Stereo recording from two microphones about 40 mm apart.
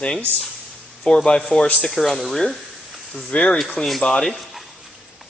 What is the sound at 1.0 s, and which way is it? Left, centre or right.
Speech, centre.